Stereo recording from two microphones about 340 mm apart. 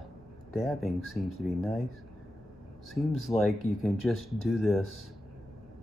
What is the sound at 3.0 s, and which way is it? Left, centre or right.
Speech, centre.